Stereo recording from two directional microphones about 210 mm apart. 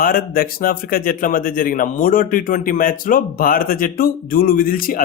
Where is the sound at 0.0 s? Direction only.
45° left (ahead or behind).